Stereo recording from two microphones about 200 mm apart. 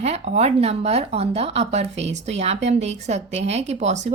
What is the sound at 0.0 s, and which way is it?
Speech, 30° right (ahead or behind).